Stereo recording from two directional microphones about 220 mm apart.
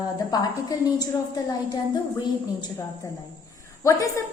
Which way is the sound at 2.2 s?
20° left (ahead or behind).